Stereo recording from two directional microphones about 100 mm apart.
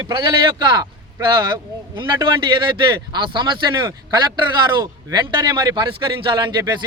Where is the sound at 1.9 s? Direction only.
55° right (ahead or behind).